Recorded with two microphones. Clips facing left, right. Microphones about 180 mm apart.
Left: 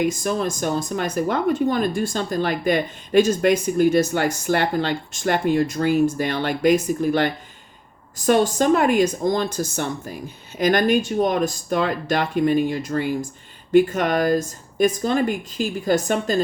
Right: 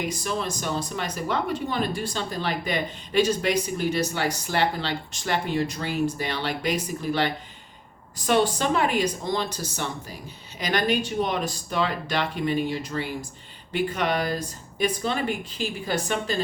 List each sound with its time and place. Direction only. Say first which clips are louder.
0.1 s speech: left 5 dB; 50° left (ahead or behind)
8.3 s speech: left 5 dB; 45° left (ahead or behind)